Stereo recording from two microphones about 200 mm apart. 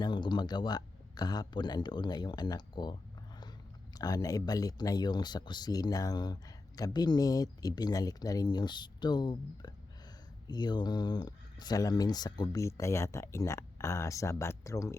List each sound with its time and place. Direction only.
0.0 s speech: 20° left (ahead or behind)